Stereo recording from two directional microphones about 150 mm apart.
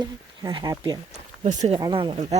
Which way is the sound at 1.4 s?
45° right (ahead or behind).